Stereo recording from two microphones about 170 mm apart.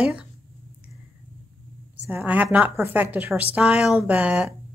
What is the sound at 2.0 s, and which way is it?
A woman's voice, 10° right (ahead or behind).